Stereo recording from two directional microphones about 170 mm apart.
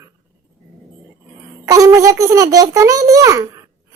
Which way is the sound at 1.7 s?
20° right (ahead or behind).